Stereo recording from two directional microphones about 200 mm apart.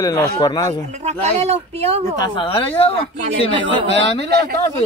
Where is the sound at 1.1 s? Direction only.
35° right (ahead or behind).